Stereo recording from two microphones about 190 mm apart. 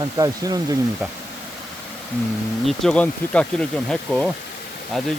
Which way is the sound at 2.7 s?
5° left (ahead or behind).